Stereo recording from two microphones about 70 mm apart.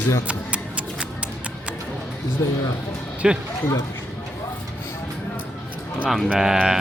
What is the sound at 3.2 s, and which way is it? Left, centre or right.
Speech, centre.